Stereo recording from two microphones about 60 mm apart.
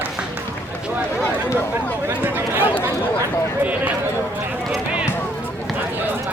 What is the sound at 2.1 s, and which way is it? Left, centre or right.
Chatter, right.